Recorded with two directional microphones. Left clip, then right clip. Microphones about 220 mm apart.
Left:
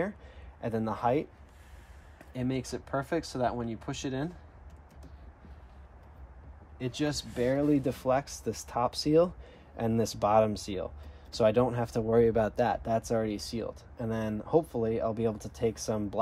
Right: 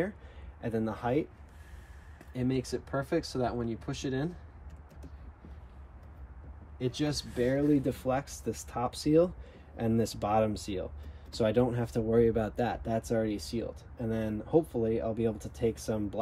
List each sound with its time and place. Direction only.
0.6 s speech: 30° left (ahead or behind)
2.3 s speech: 25° left (ahead or behind)
4.0 s speech: centre (ahead or behind)
6.8 s speech: centre (ahead or behind)
7.3 s speech: 25° left (ahead or behind)